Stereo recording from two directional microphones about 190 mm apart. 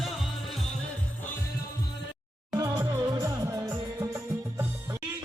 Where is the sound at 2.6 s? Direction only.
20° right (ahead or behind).